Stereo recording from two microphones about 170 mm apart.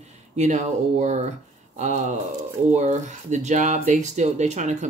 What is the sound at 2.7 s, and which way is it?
Speech, 45° right (ahead or behind).